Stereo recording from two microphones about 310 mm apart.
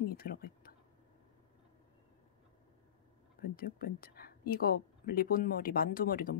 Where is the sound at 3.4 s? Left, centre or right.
Left.